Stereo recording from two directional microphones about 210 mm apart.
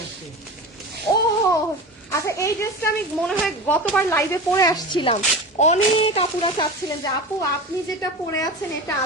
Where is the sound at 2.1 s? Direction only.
15° left (ahead or behind).